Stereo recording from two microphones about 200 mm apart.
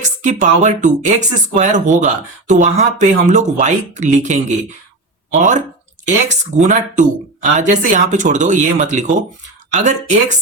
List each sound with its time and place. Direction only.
0.0 s speech: 35° right (ahead or behind)